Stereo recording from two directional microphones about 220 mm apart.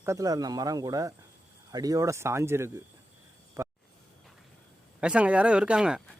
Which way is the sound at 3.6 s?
15° right (ahead or behind).